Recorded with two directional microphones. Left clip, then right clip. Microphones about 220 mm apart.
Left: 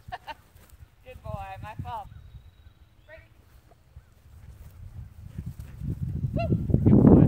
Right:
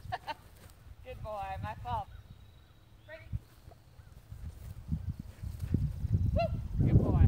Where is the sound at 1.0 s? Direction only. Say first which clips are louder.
Even; 20° left (ahead or behind).